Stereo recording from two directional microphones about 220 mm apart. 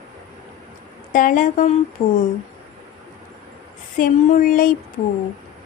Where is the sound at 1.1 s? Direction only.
35° left (ahead or behind).